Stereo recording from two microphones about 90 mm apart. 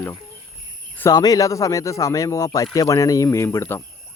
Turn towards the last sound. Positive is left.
turn(degrees=30)  # may be behind; listen again after turning